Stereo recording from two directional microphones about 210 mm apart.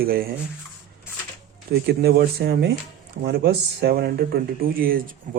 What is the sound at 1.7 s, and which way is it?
Speech, 50° right (ahead or behind).